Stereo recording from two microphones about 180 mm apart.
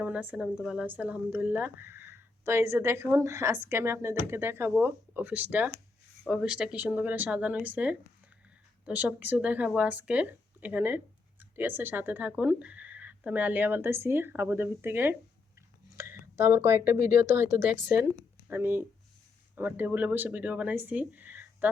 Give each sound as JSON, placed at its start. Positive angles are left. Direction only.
{"t": 0.0, "sound": "speech", "side_deg": -10}